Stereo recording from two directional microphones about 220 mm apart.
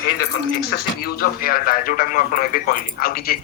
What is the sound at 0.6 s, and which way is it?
Speech, 45° left (ahead or behind).